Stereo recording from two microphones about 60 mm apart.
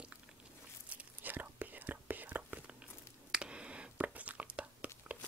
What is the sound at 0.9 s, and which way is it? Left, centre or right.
Whispering, right.